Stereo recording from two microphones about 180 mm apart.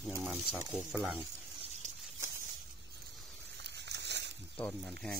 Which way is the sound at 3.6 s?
70° right (ahead or behind).